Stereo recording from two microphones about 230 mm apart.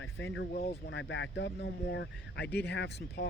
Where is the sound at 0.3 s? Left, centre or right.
Left.